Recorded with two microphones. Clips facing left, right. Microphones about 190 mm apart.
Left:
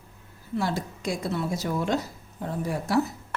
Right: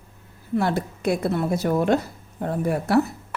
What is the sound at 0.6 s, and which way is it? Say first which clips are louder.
A woman's voice: right 5 dB; 60° right (ahead or behind).